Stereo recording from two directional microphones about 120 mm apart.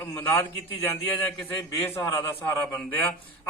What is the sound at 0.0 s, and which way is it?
A man's voice, 20° left (ahead or behind).